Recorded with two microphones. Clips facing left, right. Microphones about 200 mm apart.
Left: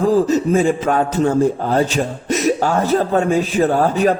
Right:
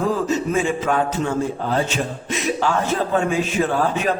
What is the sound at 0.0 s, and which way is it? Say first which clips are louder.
A man's voice: left 6 dB; 35° left (ahead or behind).